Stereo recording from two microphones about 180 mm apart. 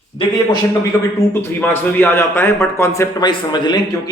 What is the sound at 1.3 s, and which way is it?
A man's voice, 15° left (ahead or behind).